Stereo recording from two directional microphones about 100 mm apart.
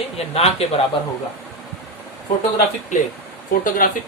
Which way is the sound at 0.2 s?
90° left.